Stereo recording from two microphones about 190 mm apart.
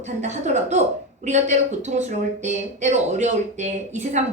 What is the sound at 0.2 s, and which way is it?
Speech, 40° right (ahead or behind).